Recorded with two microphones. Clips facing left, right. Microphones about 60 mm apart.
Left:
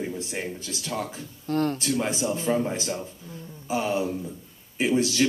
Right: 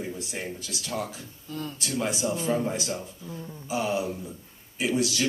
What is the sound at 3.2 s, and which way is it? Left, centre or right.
Speech, right.